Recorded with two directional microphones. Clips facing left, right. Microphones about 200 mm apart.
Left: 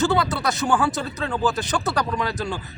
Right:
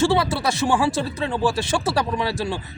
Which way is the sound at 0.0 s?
25° right (ahead or behind).